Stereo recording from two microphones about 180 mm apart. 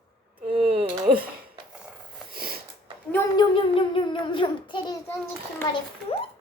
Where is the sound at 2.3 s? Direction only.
55° right (ahead or behind).